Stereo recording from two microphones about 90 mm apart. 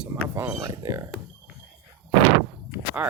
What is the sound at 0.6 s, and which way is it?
Speech, 35° right (ahead or behind).